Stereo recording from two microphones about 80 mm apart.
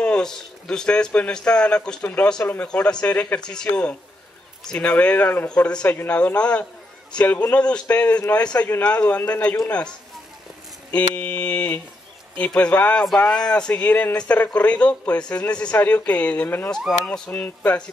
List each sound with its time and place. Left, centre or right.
0.0 s speech: centre
2.4 s speech: left
2.7 s speech: centre
5.5 s speech: centre
5.9 s speech: left